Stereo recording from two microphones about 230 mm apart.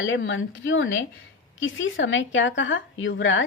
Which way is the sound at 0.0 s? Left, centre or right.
Left.